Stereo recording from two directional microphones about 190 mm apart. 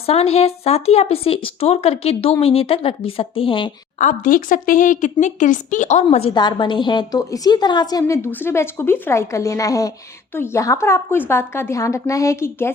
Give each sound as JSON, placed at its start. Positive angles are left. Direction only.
{"t": 0.0, "sound": "speech", "side_deg": 30}
{"t": 3.9, "sound": "a woman's voice", "side_deg": 40}
{"t": 6.3, "sound": "a woman's voice", "side_deg": 25}